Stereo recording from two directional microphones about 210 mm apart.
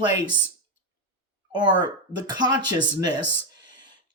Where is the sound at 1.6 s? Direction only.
20° right (ahead or behind).